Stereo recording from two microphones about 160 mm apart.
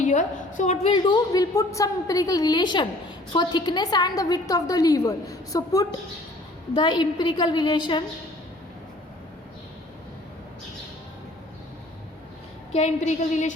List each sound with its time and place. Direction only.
0.0 s a woman's voice: 50° left (ahead or behind)
0.9 s a woman's voice: 30° left (ahead or behind)
12.7 s a woman's voice: 45° left (ahead or behind)